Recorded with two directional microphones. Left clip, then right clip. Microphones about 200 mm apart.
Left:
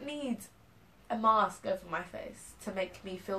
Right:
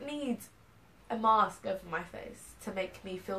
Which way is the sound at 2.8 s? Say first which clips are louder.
Even; 5° left (ahead or behind).